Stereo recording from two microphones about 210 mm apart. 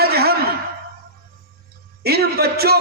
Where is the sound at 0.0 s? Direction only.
50° right (ahead or behind).